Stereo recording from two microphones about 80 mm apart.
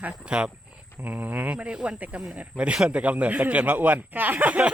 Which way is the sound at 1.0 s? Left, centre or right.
Right.